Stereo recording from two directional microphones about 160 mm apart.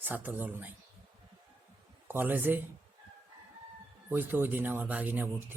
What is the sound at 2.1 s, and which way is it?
Speech, 10° right (ahead or behind).